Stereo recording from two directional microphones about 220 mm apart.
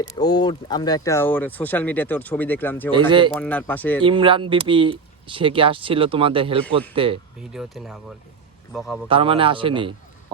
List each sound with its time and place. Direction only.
0.2 s speech: 20° left (ahead or behind)
3.1 s speech: 20° right (ahead or behind)
3.4 s speech: 5° left (ahead or behind)
4.0 s speech: 20° right (ahead or behind)
7.5 s speech: centre (ahead or behind)
9.0 s speech: 25° right (ahead or behind)